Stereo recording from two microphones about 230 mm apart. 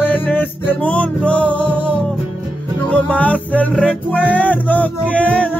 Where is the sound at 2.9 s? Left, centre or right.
Centre.